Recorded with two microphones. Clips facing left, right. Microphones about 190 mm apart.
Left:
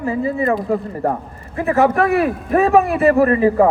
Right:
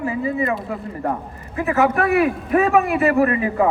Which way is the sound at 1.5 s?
35° left (ahead or behind).